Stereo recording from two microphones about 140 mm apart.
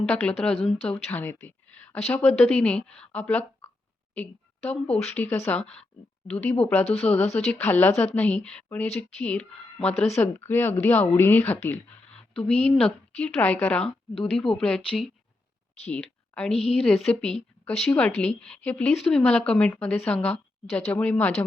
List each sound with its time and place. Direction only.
0.0 s a woman's voice: 10° left (ahead or behind)
15.9 s a sound: 10° left (ahead or behind)
16.5 s a woman's voice: 45° left (ahead or behind)
16.8 s a woman's voice: 5° left (ahead or behind)